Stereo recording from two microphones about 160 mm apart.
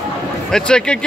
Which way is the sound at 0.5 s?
5° left (ahead or behind).